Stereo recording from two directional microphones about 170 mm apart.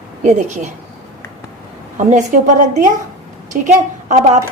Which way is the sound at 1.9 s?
45° right (ahead or behind).